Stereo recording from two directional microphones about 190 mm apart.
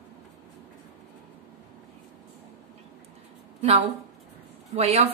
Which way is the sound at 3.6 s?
30° right (ahead or behind).